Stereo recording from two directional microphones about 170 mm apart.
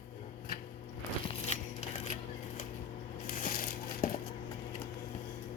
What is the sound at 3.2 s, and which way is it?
Crushing, 55° left (ahead or behind).